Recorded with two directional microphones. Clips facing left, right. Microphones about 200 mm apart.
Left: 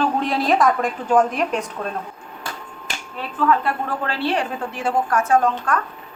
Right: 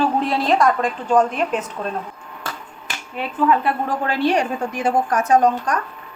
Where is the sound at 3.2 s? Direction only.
15° right (ahead or behind).